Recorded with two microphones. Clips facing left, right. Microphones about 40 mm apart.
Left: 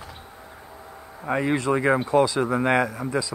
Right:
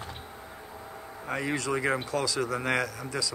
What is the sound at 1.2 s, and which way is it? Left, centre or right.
Speech, left.